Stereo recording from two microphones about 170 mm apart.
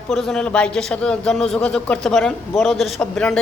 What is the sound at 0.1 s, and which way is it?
A man's voice, centre (ahead or behind).